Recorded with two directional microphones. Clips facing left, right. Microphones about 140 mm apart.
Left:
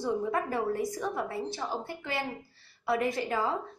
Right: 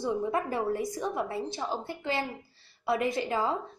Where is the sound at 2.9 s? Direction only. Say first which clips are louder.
Right 1 dB; 20° right (ahead or behind).